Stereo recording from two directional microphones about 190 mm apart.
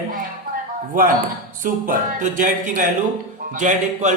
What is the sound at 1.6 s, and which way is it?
A man's voice, 45° right (ahead or behind).